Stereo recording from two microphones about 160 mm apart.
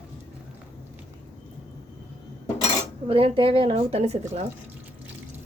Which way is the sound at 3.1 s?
35° right (ahead or behind).